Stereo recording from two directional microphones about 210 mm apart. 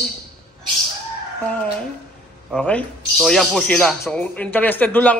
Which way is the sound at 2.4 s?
5° left (ahead or behind).